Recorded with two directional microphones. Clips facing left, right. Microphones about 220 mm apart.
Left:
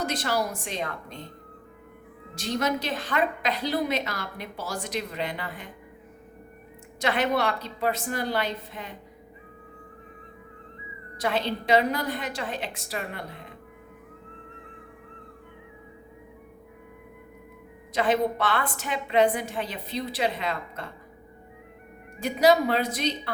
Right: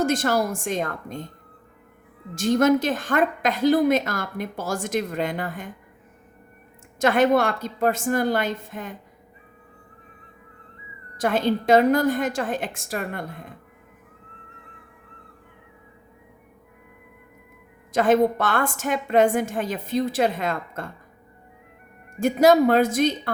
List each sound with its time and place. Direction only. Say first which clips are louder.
0.0 s a woman's voice: right 6 dB; 50° right (ahead or behind)
2.3 s a woman's voice: right 9 dB; 50° right (ahead or behind)
7.0 s a woman's voice: right 6 dB; 45° right (ahead or behind)
11.2 s a woman's voice: right 6 dB; 45° right (ahead or behind)
17.9 s a woman's voice: right 6 dB; 45° right (ahead or behind)
22.2 s a woman's voice: right 5 dB; 45° right (ahead or behind)